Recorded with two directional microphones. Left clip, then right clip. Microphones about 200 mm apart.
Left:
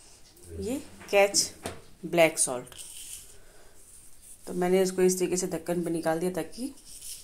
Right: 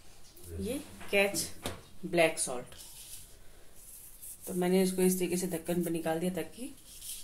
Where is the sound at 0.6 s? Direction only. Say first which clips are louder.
Left 4 dB; 20° left (ahead or behind).